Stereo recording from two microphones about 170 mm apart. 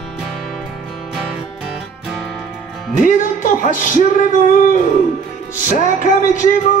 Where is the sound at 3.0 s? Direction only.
50° left (ahead or behind).